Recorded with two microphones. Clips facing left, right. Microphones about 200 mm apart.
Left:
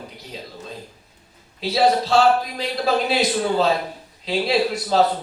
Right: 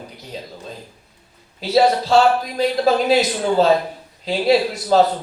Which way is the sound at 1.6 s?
45° right (ahead or behind).